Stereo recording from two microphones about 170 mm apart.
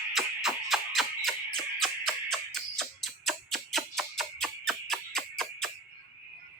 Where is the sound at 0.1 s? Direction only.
Centre (ahead or behind).